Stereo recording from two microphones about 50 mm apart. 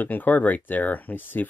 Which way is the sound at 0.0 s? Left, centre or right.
Left.